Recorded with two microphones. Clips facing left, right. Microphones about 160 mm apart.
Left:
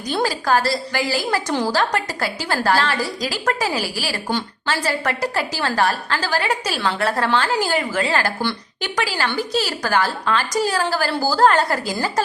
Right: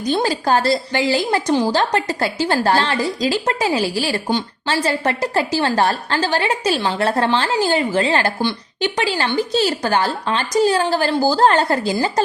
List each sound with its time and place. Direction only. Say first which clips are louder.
0.1 s a woman's voice: right 2 dB; 25° right (ahead or behind)